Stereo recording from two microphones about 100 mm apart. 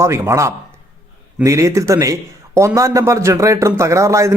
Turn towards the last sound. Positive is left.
turn(degrees=-30)  # may be behind; listen again after turning